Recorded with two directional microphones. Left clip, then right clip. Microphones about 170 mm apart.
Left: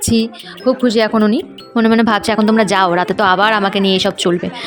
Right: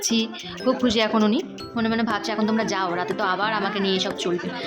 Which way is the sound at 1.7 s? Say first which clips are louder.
Left 11 dB; 45° left (ahead or behind).